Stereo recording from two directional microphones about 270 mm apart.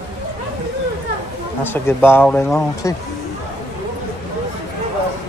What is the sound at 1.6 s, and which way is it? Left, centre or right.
Speech, centre.